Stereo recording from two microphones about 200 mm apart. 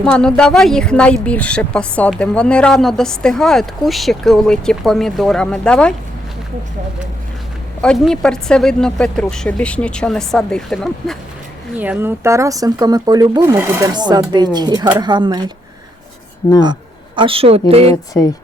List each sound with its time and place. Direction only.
0.0 s speech: 5° left (ahead or behind)
7.8 s speech: centre (ahead or behind)
11.8 s a woman's voice: 10° right (ahead or behind)
17.2 s a woman's voice: 25° right (ahead or behind)
17.8 s speech: 15° left (ahead or behind)